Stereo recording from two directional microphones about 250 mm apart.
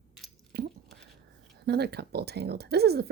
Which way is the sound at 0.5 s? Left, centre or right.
Right.